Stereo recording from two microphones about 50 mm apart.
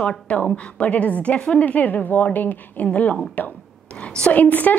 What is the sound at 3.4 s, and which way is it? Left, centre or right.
Speech, left.